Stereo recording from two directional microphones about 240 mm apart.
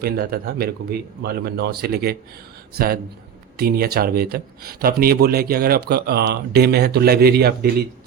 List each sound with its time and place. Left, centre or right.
0.0 s speech: right